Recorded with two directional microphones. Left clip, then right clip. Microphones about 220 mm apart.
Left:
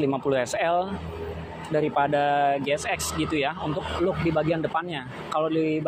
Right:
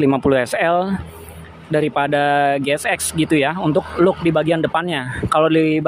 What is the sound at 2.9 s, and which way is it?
Speech, 70° right (ahead or behind).